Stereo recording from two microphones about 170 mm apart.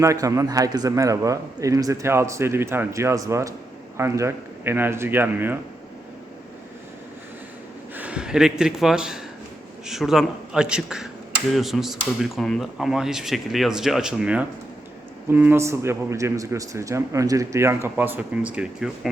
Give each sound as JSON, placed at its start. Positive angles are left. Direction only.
{"t": 0.0, "sound": "a man's voice", "side_deg": -20}
{"t": 7.9, "sound": "a man's voice", "side_deg": -5}